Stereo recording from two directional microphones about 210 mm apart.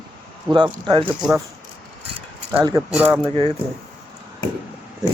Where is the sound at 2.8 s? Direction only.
5° right (ahead or behind).